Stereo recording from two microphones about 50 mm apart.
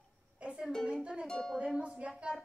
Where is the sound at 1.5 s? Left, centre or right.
Right.